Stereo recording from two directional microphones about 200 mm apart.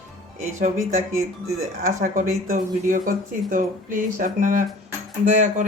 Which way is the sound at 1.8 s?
40° right (ahead or behind).